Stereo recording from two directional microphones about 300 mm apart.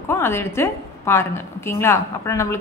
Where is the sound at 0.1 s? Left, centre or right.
Centre.